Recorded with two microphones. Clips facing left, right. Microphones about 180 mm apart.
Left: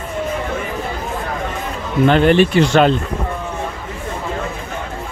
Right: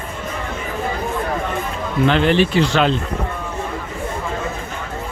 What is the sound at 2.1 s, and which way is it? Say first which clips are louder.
Speech: left 4 dB; 50° left (ahead or behind).